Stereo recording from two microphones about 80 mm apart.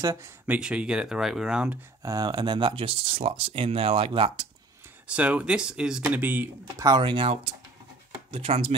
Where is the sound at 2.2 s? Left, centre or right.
Right.